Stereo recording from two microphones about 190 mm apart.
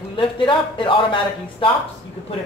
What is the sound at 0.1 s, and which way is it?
Speech, 25° left (ahead or behind).